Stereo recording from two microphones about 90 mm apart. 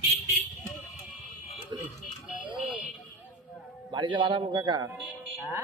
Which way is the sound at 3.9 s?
60° right (ahead or behind).